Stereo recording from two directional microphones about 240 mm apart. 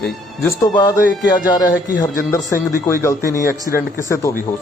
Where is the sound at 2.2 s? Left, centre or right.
Centre.